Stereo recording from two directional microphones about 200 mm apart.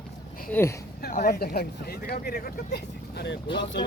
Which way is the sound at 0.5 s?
15° left (ahead or behind).